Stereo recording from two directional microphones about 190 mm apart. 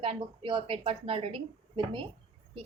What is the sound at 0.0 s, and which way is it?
A woman's voice, 30° right (ahead or behind).